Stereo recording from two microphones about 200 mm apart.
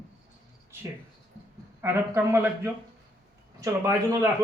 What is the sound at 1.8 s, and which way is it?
A man's voice, 10° right (ahead or behind).